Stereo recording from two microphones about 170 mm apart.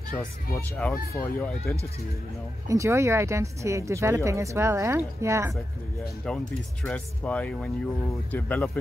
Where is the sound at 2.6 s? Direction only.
15° right (ahead or behind).